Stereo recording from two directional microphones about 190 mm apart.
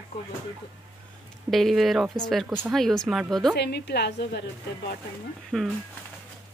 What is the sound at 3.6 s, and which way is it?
A woman's voice, 60° left (ahead or behind).